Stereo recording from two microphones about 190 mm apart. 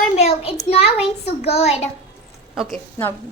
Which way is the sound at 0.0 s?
35° left (ahead or behind).